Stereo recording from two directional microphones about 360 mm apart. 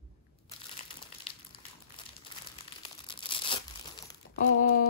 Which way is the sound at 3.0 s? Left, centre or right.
Centre.